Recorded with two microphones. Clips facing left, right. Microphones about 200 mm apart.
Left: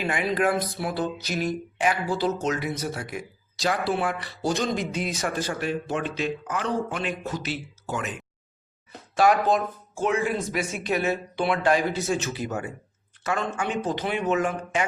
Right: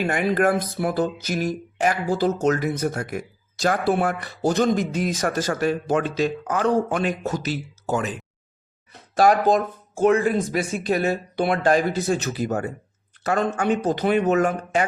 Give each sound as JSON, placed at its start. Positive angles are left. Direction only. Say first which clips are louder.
{"t": 0.0, "sound": "speech", "louder": "right 4 dB", "side_deg": -50}